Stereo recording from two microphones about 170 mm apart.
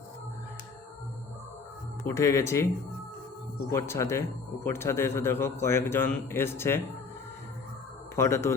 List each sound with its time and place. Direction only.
2.0 s a man's voice: 15° left (ahead or behind)
3.7 s a man's voice: 15° left (ahead or behind)
8.1 s a man's voice: 15° left (ahead or behind)